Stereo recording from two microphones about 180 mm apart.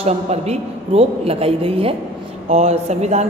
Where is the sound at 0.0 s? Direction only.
35° right (ahead or behind).